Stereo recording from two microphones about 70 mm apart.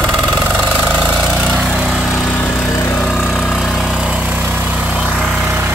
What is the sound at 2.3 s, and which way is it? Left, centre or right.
Lawn mower, left.